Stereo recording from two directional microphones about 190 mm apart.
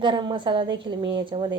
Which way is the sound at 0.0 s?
25° right (ahead or behind).